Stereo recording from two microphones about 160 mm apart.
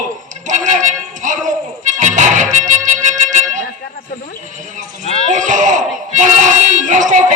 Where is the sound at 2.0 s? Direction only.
50° right (ahead or behind).